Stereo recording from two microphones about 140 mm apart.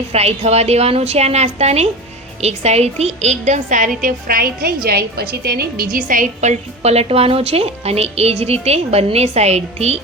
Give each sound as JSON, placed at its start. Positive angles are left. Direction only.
{"t": 0.1, "sound": "a woman's voice", "side_deg": -50}